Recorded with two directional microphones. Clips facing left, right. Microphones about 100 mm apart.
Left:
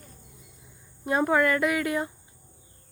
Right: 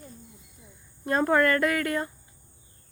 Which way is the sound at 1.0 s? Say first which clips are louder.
Even; 10° left (ahead or behind).